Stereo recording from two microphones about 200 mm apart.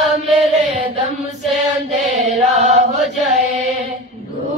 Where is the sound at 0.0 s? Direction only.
Centre (ahead or behind).